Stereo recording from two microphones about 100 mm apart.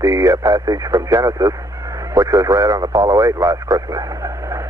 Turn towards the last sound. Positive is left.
turn(degrees=-30)  # may be behind; listen again after turning